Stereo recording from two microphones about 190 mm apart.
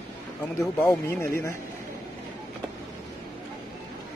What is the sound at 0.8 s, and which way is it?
Speech, 10° left (ahead or behind).